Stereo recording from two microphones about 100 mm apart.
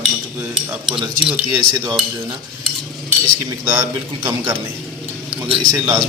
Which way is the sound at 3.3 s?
25° right (ahead or behind).